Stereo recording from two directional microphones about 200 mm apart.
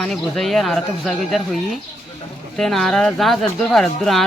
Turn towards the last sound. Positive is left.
turn(degrees=0)  # may be behind; listen again after turning